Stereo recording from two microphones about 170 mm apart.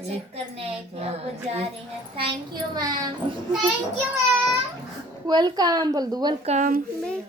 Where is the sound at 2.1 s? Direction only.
30° right (ahead or behind).